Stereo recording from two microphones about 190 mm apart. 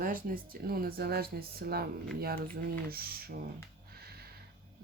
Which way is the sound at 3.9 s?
55° right (ahead or behind).